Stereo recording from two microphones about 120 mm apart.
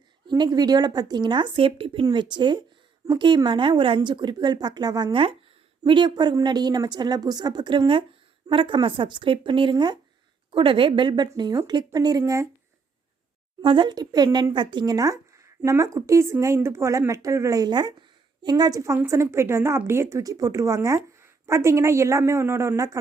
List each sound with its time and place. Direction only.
0.3 s a woman's voice: 35° right (ahead or behind)
13.6 s a woman's voice: 45° right (ahead or behind); by 23.0 s 25° right (ahead or behind)